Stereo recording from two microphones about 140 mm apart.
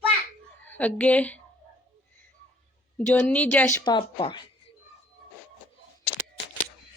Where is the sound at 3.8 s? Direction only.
35° left (ahead or behind).